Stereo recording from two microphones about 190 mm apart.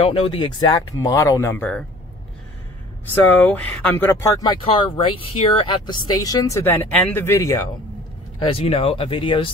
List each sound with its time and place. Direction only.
0.0 s speech: 30° left (ahead or behind); by 1.9 s 5° left (ahead or behind)
3.3 s speech: 10° left (ahead or behind)
8.5 s speech: 30° left (ahead or behind)